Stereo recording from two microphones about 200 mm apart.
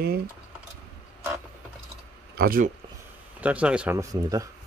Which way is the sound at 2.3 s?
45° right (ahead or behind).